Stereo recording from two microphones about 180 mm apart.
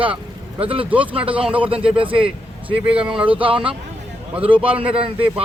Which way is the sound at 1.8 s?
30° right (ahead or behind).